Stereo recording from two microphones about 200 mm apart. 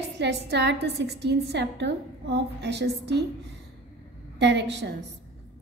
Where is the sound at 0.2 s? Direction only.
60° right (ahead or behind).